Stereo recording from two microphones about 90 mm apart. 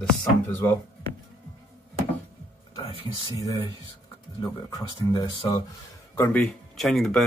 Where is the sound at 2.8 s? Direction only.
90° left.